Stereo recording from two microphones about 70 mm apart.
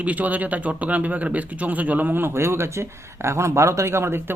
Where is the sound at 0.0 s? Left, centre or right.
Right.